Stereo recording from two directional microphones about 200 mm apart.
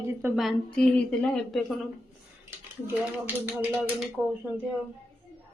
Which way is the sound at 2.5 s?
10° right (ahead or behind).